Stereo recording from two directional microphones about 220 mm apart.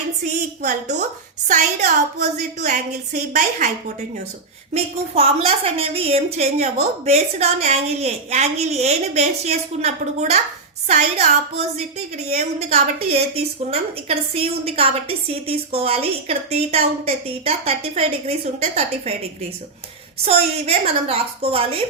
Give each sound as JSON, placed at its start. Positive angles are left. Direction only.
{"t": 0.3, "sound": "a woman's voice", "side_deg": -35}
{"t": 4.7, "sound": "a woman's voice", "side_deg": -25}
{"t": 20.2, "sound": "a woman's voice", "side_deg": -30}